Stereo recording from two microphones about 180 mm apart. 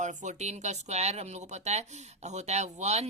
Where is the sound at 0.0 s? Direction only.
40° right (ahead or behind).